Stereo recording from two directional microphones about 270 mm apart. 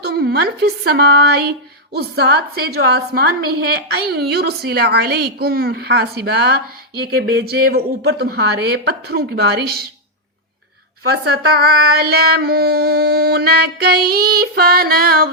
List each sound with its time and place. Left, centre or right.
0.0 s speech: right
11.1 s speech: right